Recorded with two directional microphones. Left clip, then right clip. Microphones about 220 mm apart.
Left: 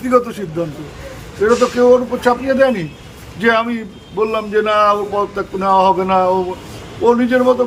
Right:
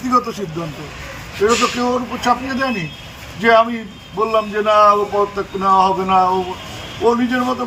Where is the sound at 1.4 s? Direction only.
25° left (ahead or behind).